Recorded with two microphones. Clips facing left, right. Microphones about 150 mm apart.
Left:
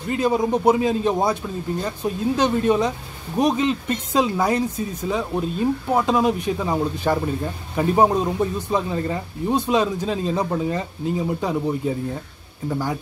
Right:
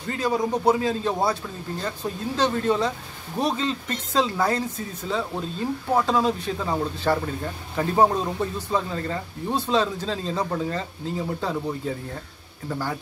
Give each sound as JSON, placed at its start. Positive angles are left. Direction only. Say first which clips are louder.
{"t": 0.1, "sound": "a man's voice", "louder": "left 4 dB", "side_deg": 20}